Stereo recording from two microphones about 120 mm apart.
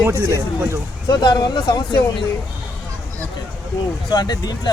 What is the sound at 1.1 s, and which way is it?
Speech, 40° left (ahead or behind).